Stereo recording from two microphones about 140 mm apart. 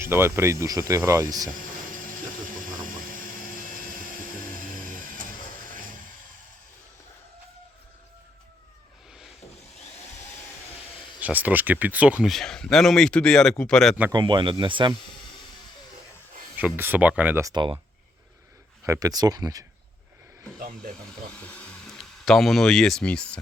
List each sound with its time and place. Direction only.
0.0 s speech: 20° right (ahead or behind)
11.2 s speech: 10° right (ahead or behind); by 13.9 s 5° left (ahead or behind)
14.1 s speech: 30° right (ahead or behind)
16.6 s speech: 10° right (ahead or behind)
17.4 s speech: 30° right (ahead or behind)
18.9 s speech: 25° right (ahead or behind)
20.6 s speech: 90° right
21.4 s speech: 5° left (ahead or behind)